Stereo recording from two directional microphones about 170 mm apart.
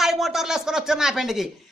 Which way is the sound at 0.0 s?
Centre (ahead or behind).